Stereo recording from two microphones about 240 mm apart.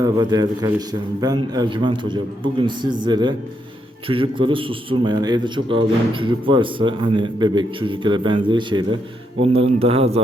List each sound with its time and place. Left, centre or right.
0.0 s a man's voice: centre